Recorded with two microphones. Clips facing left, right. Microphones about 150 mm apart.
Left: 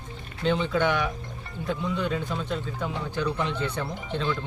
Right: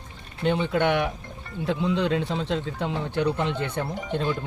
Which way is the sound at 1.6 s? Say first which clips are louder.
Right 4 dB; 90° right.